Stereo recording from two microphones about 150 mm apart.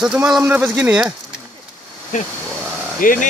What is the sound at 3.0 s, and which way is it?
Speech, 65° left (ahead or behind).